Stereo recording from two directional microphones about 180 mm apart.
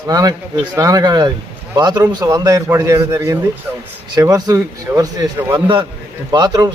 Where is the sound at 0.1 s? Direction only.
20° right (ahead or behind).